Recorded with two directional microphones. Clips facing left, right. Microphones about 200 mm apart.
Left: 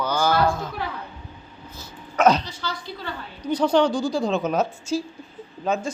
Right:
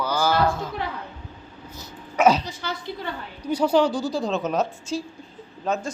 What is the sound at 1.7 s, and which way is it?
Dog, 15° right (ahead or behind).